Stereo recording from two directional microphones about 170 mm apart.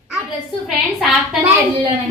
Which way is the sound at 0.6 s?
Centre (ahead or behind).